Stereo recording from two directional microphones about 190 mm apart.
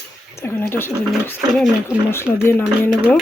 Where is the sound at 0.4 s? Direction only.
10° left (ahead or behind).